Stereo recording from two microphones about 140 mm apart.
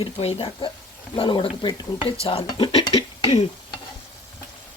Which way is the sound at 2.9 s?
45° left (ahead or behind).